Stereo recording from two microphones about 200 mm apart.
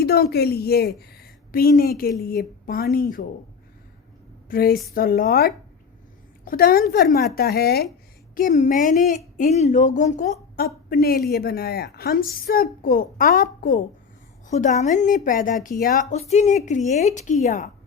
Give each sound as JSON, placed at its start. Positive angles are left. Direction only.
{"t": 0.0, "sound": "a woman's voice", "side_deg": 50}
{"t": 4.4, "sound": "a woman's voice", "side_deg": 50}
{"t": 8.4, "sound": "a woman's voice", "side_deg": 40}